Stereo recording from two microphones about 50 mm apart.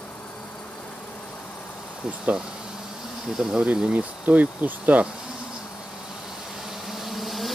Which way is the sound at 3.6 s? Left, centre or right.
Right.